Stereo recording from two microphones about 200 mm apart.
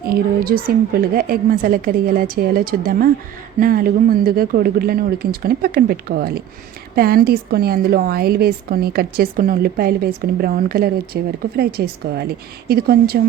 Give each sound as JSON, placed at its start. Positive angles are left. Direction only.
{"t": 0.1, "sound": "a woman's voice", "side_deg": -45}